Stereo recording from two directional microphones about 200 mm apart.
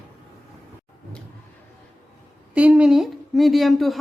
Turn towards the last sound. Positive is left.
turn(degrees=0)  # may be behind; listen again after turning